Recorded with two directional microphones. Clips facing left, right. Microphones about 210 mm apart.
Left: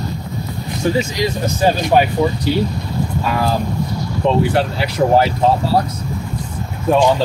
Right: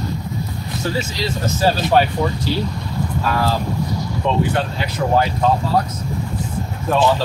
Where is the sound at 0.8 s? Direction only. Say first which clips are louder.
Left 6 dB; 20° left (ahead or behind).